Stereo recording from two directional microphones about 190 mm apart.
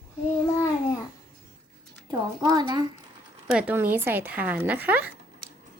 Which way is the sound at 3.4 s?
5° right (ahead or behind).